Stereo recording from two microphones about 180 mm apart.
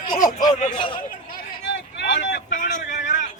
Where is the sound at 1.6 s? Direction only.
85° left.